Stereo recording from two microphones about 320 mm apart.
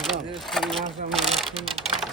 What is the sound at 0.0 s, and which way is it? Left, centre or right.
Sewing machine, centre.